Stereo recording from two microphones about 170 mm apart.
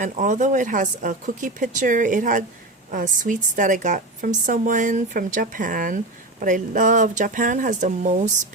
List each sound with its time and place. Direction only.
0.0 s a woman's voice: 50° right (ahead or behind)